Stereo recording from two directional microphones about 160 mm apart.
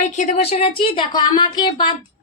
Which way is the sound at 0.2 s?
40° left (ahead or behind).